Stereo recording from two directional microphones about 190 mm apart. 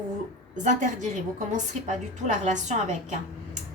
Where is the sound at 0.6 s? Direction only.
40° right (ahead or behind).